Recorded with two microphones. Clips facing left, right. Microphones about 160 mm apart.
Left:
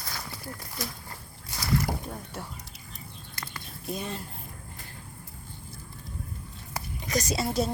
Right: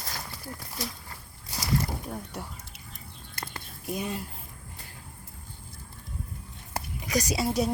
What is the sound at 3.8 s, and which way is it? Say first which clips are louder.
Speech: right 2 dB; 10° right (ahead or behind).